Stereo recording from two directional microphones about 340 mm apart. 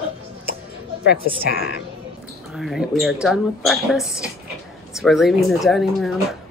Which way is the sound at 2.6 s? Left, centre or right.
Centre.